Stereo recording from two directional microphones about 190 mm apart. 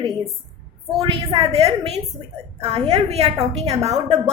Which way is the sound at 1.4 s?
30° right (ahead or behind).